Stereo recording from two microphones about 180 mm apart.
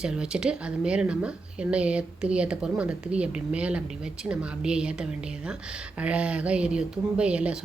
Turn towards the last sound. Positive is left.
turn(degrees=-5)  # may be behind; listen again after turning